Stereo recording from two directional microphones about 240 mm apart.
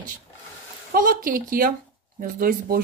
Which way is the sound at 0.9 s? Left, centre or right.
Right.